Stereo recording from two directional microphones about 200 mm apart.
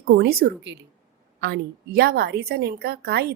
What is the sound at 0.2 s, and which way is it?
A woman's voice, 50° right (ahead or behind).